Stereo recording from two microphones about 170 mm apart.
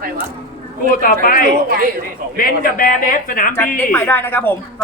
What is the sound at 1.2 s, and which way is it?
Speech, 55° left (ahead or behind).